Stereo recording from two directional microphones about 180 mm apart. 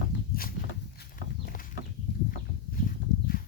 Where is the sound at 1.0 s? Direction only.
55° left (ahead or behind).